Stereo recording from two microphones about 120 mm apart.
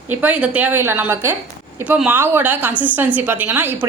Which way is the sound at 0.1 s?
10° right (ahead or behind).